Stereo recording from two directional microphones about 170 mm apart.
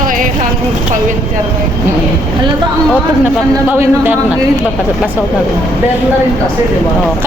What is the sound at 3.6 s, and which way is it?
Speech, 15° right (ahead or behind).